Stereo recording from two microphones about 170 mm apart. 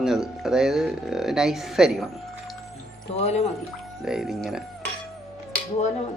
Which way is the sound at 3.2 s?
40° left (ahead or behind).